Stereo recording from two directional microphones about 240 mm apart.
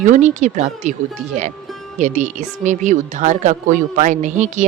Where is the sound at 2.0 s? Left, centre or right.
Right.